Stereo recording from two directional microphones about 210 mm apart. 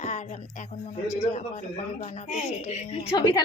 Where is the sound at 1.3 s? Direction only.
35° left (ahead or behind).